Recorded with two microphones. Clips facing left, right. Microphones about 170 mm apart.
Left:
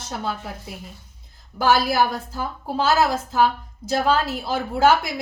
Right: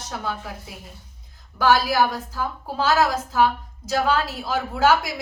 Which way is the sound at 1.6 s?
25° left (ahead or behind).